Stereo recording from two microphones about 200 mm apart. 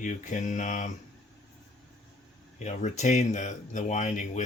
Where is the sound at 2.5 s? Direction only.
35° left (ahead or behind).